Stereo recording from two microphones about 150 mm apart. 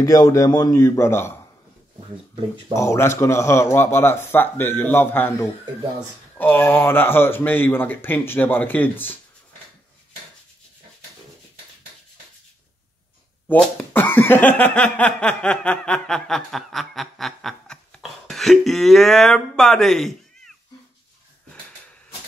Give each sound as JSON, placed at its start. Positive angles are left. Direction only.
{"t": 0.0, "sound": "speech", "side_deg": 25}
{"t": 2.7, "sound": "speech", "side_deg": 20}
{"t": 13.5, "sound": "speech", "side_deg": 10}